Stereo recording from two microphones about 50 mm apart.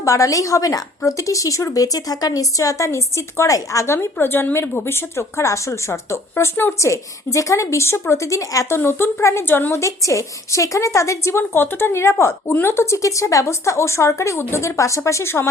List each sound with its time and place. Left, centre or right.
0.0 s speech: left
5.4 s speech: left
6.7 s a woman's voice: left
8.8 s speech: left
9.7 s a woman's voice: left
11.9 s speech: left